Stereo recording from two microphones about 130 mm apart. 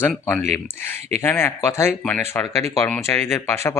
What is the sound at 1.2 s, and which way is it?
Speech, 15° left (ahead or behind).